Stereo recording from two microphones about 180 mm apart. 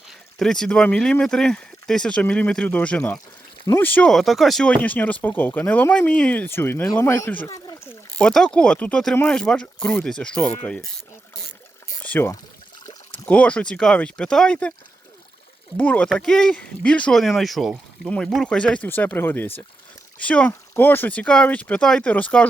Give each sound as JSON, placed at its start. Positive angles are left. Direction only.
{"t": 0.1, "sound": "speech", "side_deg": 5}
{"t": 8.2, "sound": "speech", "side_deg": 5}
{"t": 12.0, "sound": "speech", "side_deg": 10}
{"t": 12.8, "sound": "a sound", "side_deg": 20}
{"t": 13.2, "sound": "speech", "side_deg": 5}
{"t": 15.8, "sound": "speech", "side_deg": 10}